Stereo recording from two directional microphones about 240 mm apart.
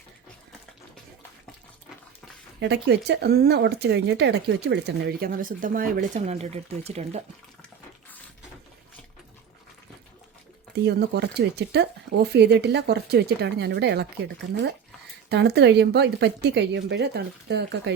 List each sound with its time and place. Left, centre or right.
2.6 s speech: right
10.8 s speech: right